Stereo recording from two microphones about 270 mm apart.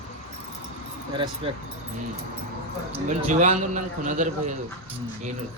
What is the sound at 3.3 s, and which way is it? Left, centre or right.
Speech, right.